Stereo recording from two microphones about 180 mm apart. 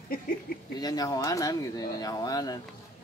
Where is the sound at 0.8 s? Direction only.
20° left (ahead or behind).